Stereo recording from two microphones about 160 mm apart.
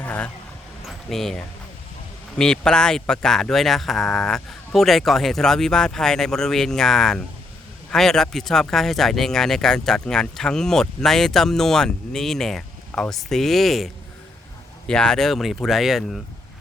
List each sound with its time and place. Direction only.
0.0 s vehicle: 10° left (ahead or behind)
0.9 s speech: centre (ahead or behind)